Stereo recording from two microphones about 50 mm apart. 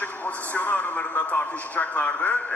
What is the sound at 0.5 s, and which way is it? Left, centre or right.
A man's voice, left.